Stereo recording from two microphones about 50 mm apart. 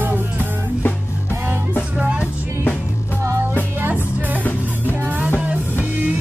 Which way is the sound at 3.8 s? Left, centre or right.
Right.